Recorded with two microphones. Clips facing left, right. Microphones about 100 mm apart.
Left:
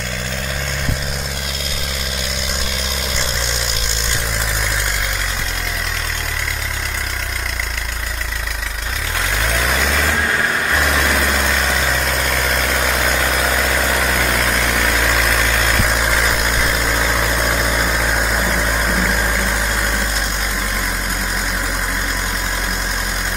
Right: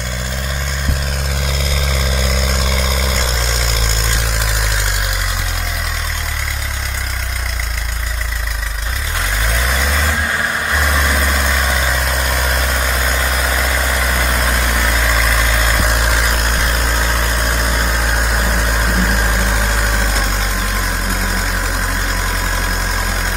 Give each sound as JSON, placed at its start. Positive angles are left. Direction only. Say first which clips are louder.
{"t": 9.7, "sound": "vehicle", "louder": "even", "side_deg": -5}
{"t": 12.2, "sound": "vehicle", "louder": "even", "side_deg": -15}
{"t": 13.2, "sound": "vehicle", "louder": "left 1 dB", "side_deg": 0}
{"t": 19.3, "sound": "vehicle", "louder": "right 1 dB", "side_deg": -25}